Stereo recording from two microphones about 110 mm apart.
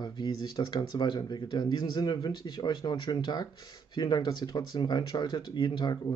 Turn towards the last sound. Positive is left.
turn(degrees=40)  # may be behind; listen again after turning